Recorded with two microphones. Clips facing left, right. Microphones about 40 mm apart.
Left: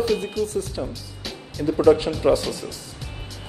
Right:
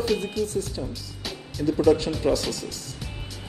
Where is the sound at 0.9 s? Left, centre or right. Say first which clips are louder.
Even; centre.